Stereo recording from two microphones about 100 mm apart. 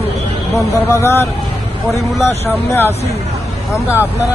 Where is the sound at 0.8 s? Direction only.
25° left (ahead or behind).